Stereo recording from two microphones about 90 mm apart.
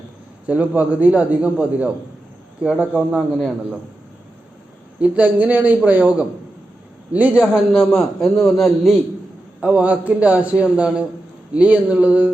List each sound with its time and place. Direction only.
0.4 s a man's voice: 15° right (ahead or behind)
3.2 s a man's voice: centre (ahead or behind)
4.9 s a man's voice: 15° right (ahead or behind)
9.6 s a man's voice: 15° right (ahead or behind)